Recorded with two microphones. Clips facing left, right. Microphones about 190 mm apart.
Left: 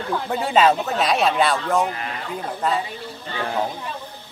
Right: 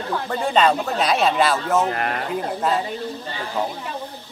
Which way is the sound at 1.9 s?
60° right (ahead or behind).